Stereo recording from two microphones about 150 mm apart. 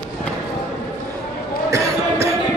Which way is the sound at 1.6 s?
20° right (ahead or behind).